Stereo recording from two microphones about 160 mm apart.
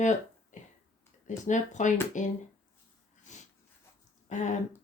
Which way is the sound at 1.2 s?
50° left (ahead or behind).